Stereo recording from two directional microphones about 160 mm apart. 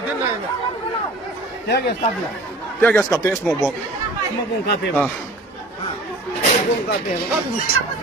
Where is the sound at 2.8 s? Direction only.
15° left (ahead or behind).